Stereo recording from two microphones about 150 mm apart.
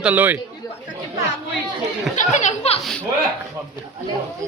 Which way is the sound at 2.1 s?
55° left (ahead or behind).